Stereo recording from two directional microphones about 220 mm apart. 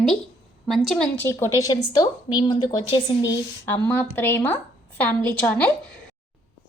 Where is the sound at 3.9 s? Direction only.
10° left (ahead or behind).